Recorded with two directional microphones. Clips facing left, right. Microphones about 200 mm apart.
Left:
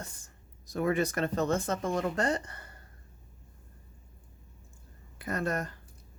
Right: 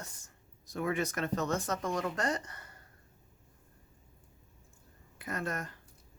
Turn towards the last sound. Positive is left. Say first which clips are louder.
# left 5 dB
turn(degrees=35)  # may be behind; listen again after turning